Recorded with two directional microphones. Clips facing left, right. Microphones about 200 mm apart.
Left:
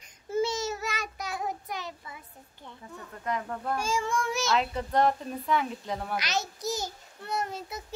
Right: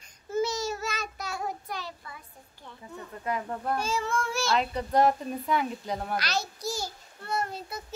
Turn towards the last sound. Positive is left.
turn(degrees=20)  # may be behind; listen again after turning